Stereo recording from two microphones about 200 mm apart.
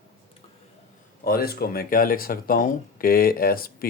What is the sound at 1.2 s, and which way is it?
Speech, 50° left (ahead or behind).